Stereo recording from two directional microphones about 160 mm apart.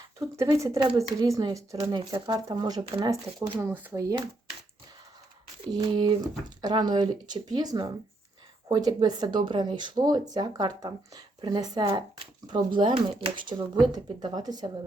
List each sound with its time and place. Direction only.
0.2 s speech: 20° right (ahead or behind)
5.7 s speech: 30° right (ahead or behind)